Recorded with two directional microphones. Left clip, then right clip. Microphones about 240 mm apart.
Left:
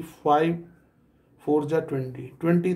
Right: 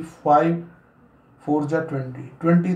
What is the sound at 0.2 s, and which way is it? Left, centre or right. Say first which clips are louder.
Speech: right 4 dB; left.